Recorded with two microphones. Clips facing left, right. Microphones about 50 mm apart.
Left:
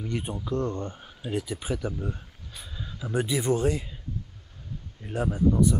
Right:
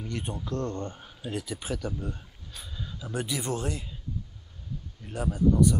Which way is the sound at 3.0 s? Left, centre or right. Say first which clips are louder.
Left 5 dB; left.